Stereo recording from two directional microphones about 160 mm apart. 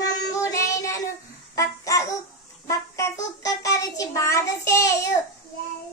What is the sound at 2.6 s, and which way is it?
A child's voice, 20° left (ahead or behind).